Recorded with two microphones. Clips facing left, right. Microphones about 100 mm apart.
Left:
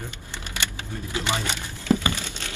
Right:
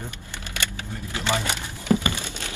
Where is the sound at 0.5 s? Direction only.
20° left (ahead or behind).